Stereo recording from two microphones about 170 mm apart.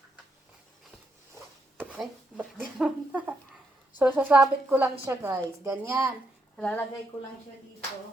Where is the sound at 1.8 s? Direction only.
10° right (ahead or behind).